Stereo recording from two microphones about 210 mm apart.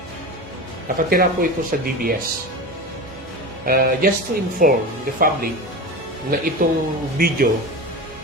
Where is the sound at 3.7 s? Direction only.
45° right (ahead or behind).